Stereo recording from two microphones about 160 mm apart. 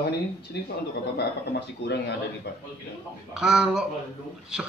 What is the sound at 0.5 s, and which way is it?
Speech, 90° left.